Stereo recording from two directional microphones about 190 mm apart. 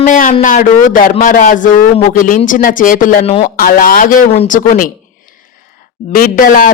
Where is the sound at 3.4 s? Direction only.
50° left (ahead or behind).